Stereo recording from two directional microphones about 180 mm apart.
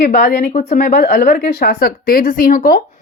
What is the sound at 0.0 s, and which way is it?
Speech, 60° left (ahead or behind).